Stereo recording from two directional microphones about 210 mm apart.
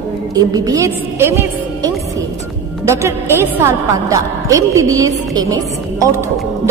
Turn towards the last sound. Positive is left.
turn(degrees=-15)  # may be behind; listen again after turning